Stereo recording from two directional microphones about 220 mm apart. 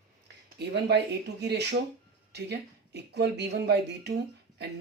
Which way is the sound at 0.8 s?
50° right (ahead or behind).